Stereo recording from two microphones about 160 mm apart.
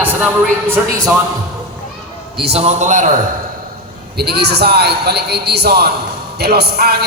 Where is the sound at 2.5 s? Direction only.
40° right (ahead or behind).